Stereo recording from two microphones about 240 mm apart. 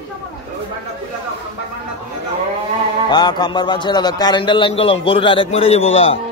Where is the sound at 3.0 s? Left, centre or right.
Centre.